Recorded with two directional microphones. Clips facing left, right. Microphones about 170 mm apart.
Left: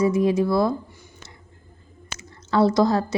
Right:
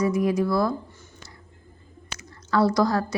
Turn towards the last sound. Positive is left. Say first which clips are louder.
# left 3 dB
turn(degrees=25)  # may be behind; listen again after turning